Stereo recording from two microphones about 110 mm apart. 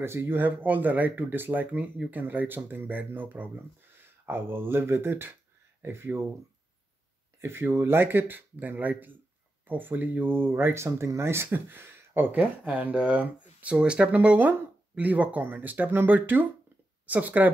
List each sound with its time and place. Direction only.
0.0 s speech: 20° right (ahead or behind)
7.3 s speech: 20° right (ahead or behind)